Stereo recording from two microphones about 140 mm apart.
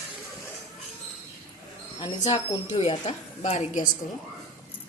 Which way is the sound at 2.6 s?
50° left (ahead or behind).